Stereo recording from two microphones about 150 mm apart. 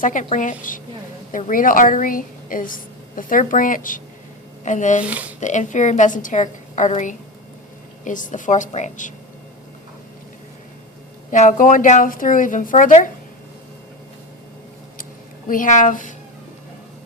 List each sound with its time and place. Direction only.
0.0 s a woman's voice: 60° left (ahead or behind)
5.0 s speech: 10° right (ahead or behind)
5.4 s a woman's voice: 55° left (ahead or behind)
11.3 s a woman's voice: 60° left (ahead or behind)
15.4 s a woman's voice: 65° left (ahead or behind)